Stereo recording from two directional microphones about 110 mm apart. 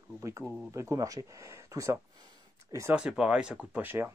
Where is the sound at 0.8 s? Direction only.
30° right (ahead or behind).